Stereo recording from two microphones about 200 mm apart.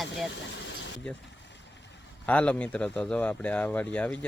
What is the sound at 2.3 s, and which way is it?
Speech, 5° left (ahead or behind).